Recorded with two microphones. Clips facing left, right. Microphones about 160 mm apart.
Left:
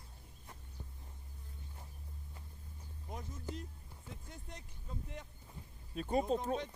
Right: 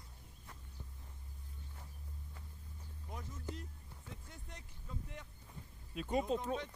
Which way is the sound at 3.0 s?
20° left (ahead or behind).